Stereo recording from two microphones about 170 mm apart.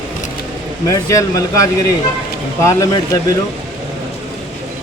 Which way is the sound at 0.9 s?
20° left (ahead or behind).